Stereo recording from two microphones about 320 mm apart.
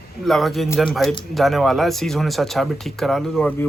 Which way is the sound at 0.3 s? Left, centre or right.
Centre.